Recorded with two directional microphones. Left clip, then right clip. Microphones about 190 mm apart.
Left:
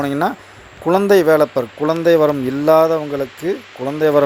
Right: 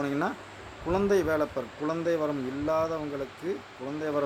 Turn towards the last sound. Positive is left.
turn(degrees=40)  # may be behind; listen again after turning